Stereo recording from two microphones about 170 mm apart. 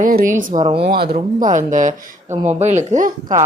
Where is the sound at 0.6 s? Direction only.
30° right (ahead or behind).